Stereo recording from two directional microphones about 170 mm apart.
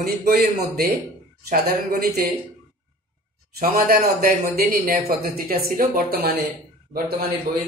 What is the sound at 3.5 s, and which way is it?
A man's voice, 60° right (ahead or behind).